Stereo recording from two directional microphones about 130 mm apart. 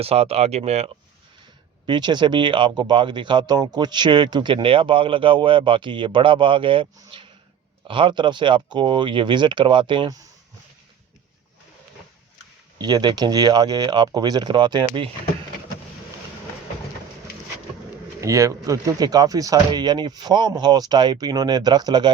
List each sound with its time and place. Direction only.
0.0 s speech: 50° right (ahead or behind)
1.9 s speech: 35° right (ahead or behind)
7.1 s a sound: 45° right (ahead or behind)
7.9 s speech: 40° right (ahead or behind)
12.8 s speech: 35° right (ahead or behind)
18.2 s speech: 25° right (ahead or behind)